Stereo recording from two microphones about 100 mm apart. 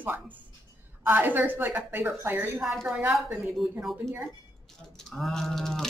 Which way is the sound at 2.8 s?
10° right (ahead or behind).